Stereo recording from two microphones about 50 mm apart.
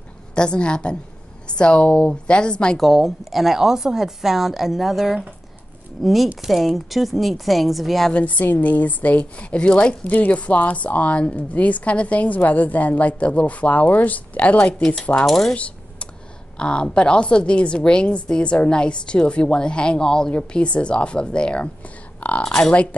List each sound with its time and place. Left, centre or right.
0.3 s a woman's voice: centre
2.8 s speech: centre
8.1 s a woman's voice: left
10.0 s a woman's voice: left
15.2 s speech: centre
15.5 s typing: left
16.5 s a woman's voice: centre